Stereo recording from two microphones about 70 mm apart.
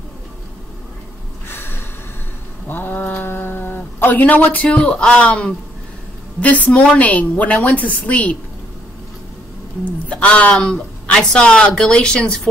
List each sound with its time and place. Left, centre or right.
1.5 s snort: left
2.7 s a woman's voice: left
10.0 s speech: centre